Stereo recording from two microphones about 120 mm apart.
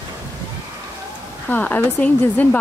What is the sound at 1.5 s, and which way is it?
Speech, 15° left (ahead or behind).